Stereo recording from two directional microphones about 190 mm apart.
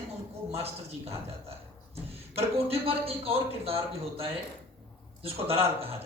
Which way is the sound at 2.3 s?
30° right (ahead or behind).